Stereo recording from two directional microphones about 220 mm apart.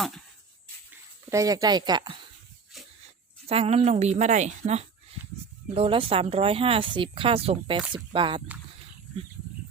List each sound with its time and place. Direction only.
1.3 s speech: 15° right (ahead or behind)
2.7 s a sound: centre (ahead or behind)
3.4 s speech: 25° right (ahead or behind)